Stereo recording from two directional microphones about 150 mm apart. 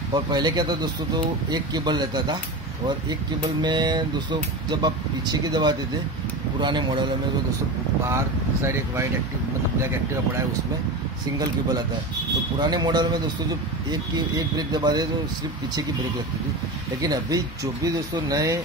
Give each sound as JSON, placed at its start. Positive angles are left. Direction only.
{"t": 0.1, "sound": "a man's voice", "side_deg": -30}
{"t": 3.6, "sound": "a man's voice", "side_deg": -30}
{"t": 8.1, "sound": "a man's voice", "side_deg": -20}
{"t": 12.5, "sound": "a man's voice", "side_deg": -30}
{"t": 17.0, "sound": "a man's voice", "side_deg": -25}